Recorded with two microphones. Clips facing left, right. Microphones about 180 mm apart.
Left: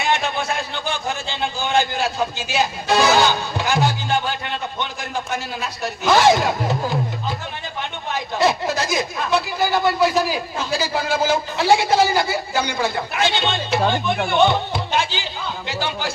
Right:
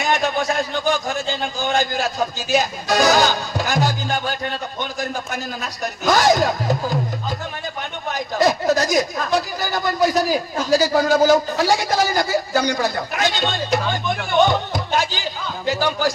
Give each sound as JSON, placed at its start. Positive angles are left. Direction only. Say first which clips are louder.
{"t": 0.0, "sound": "a sound", "louder": "right 1 dB", "side_deg": -40}
{"t": 0.7, "sound": "a man's voice", "louder": "right 5 dB", "side_deg": -40}
{"t": 8.1, "sound": "a woman's voice", "louder": "right 1 dB", "side_deg": -40}
{"t": 14.4, "sound": "music", "louder": "left 1 dB", "side_deg": -40}